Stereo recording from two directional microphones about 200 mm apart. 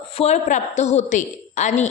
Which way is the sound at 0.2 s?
35° left (ahead or behind).